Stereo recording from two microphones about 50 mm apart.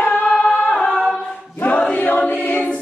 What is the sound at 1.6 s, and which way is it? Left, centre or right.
Choir, left.